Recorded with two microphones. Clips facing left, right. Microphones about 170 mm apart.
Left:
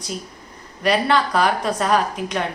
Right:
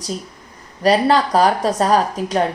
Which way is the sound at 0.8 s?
35° right (ahead or behind).